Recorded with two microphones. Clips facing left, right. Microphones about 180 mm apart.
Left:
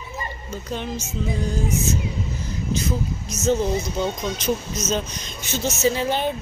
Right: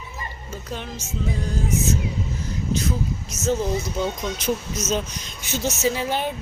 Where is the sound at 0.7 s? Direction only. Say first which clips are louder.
Left 5 dB; 5° right (ahead or behind).